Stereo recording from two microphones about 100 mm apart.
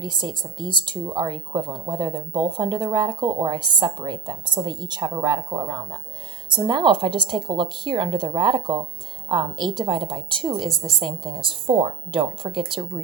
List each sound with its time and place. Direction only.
0.0 s speech: 50° right (ahead or behind)